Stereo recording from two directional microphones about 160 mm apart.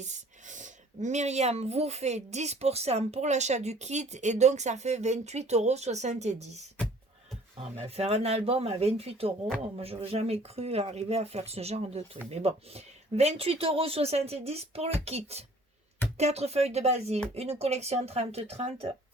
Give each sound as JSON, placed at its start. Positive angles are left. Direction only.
{"t": 0.0, "sound": "speech", "side_deg": -50}
{"t": 7.9, "sound": "speech", "side_deg": -40}